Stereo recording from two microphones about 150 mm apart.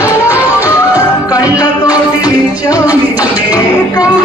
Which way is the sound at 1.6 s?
25° left (ahead or behind).